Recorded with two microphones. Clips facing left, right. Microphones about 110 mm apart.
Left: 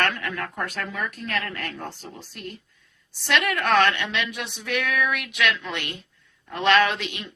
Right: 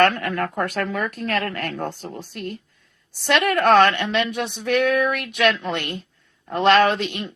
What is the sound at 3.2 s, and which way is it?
A woman's voice, 40° right (ahead or behind).